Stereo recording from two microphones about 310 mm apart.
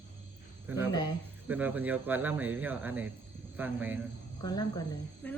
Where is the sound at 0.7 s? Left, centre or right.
Centre.